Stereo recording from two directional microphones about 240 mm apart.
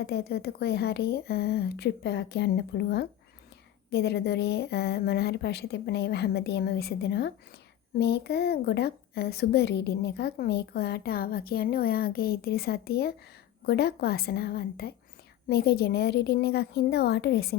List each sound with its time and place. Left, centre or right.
0.0 s a woman's voice: left